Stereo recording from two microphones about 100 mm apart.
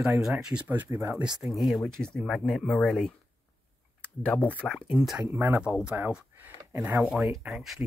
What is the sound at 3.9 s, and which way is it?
Speech, 10° left (ahead or behind).